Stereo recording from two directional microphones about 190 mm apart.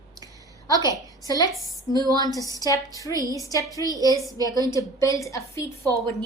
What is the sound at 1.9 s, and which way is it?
Speech, 20° right (ahead or behind).